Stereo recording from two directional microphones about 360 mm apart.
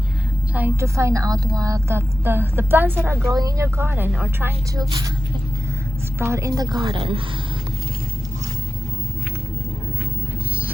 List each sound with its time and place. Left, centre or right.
0.5 s a woman's voice: centre
6.1 s a woman's voice: centre